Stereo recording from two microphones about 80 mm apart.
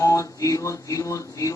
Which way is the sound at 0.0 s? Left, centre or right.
Left.